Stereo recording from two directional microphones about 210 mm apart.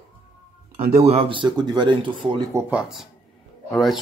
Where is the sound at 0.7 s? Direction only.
30° right (ahead or behind); by 4.0 s centre (ahead or behind).